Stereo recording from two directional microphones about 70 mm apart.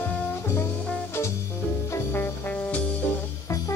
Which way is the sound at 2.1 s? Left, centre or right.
Left.